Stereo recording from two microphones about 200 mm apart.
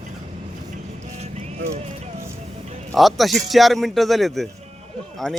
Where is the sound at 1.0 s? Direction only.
30° right (ahead or behind).